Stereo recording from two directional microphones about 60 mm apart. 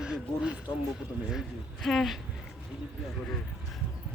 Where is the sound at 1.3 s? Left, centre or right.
Centre.